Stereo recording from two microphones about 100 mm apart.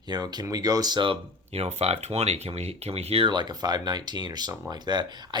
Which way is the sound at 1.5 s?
90° right.